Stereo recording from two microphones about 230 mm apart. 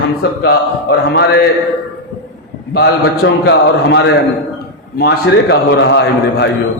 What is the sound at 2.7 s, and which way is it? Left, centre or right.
A man's voice, left.